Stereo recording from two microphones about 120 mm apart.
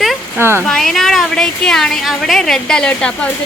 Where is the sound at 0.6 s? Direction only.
5° left (ahead or behind).